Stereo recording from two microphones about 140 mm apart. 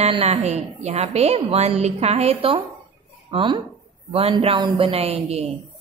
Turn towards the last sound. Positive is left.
turn(degrees=-45)  # may be behind; listen again after turning